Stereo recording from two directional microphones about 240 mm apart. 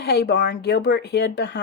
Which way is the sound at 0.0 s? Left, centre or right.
Left.